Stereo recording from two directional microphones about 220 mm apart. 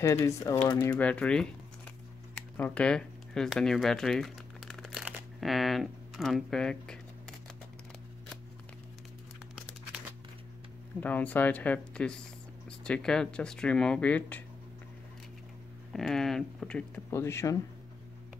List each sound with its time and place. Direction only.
0.0 s speech: 15° left (ahead or behind)
0.9 s speech: 5° left (ahead or behind)
2.3 s a sound: 5° left (ahead or behind)
9.6 s crumpling: 5° right (ahead or behind)
11.0 s speech: 5° left (ahead or behind)
15.9 s speech: centre (ahead or behind)